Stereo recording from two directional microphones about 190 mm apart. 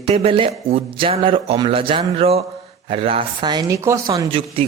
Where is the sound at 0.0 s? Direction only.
30° right (ahead or behind).